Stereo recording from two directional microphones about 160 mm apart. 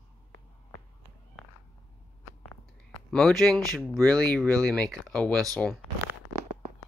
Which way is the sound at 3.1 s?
5° left (ahead or behind).